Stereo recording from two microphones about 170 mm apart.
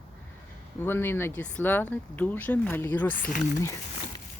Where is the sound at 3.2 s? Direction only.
50° left (ahead or behind).